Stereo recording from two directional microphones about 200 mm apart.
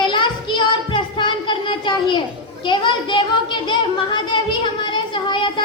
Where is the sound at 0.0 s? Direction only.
25° left (ahead or behind).